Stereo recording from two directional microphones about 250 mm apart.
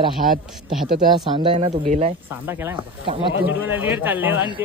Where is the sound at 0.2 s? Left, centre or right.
Right.